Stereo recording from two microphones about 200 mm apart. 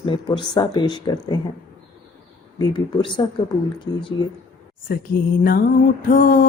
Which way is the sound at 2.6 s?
25° left (ahead or behind).